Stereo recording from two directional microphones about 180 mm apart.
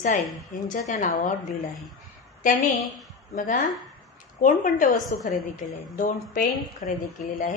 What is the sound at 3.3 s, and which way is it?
A woman's voice, 50° left (ahead or behind).